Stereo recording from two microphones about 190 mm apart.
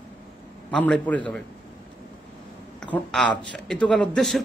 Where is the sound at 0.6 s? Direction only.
5° left (ahead or behind).